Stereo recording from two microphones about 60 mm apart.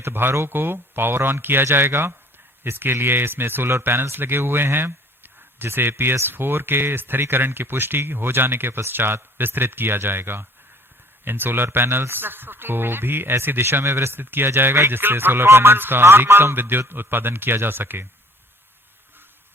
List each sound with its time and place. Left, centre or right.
0.0 s speech: right